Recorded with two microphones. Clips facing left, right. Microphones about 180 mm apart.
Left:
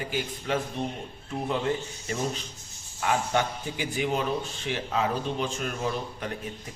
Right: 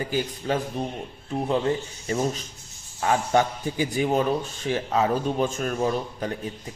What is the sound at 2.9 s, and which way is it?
Speech, 35° right (ahead or behind).